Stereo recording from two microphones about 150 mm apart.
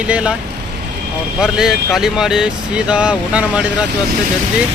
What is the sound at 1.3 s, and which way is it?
Speech, 5° right (ahead or behind).